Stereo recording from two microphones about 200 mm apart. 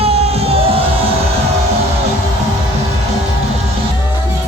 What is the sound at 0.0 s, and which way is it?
Music, 30° right (ahead or behind).